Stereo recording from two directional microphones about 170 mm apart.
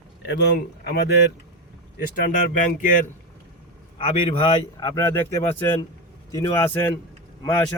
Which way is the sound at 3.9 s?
35° left (ahead or behind).